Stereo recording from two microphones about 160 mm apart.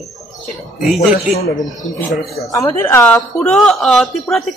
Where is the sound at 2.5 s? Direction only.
20° left (ahead or behind); by 4.4 s centre (ahead or behind).